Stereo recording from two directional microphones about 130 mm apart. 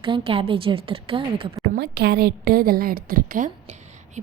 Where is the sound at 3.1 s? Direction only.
90° right; by 4.2 s 65° right (ahead or behind).